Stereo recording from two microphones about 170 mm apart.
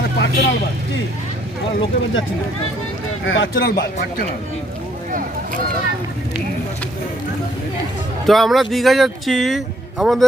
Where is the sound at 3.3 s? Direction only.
85° left.